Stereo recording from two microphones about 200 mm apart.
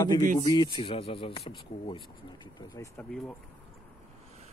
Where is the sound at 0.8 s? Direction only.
30° left (ahead or behind).